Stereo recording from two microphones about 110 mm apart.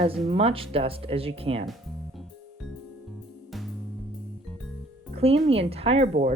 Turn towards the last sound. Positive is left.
turn(degrees=-85)